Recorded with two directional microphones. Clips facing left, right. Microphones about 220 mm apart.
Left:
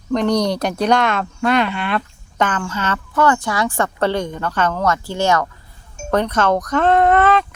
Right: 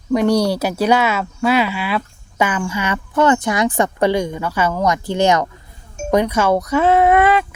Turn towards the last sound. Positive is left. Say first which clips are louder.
# right 1 dB
turn(degrees=-10)  # may be behind; listen again after turning